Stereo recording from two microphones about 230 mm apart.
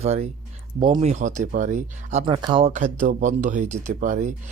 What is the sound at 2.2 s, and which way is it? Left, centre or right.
Speech, centre.